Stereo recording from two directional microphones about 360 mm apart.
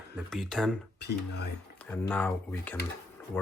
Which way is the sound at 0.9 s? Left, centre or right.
Left.